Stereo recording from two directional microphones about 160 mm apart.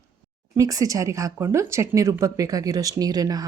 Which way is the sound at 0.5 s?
20° right (ahead or behind).